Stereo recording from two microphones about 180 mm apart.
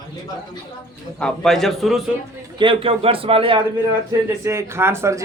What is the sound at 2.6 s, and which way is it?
Speech, 30° right (ahead or behind).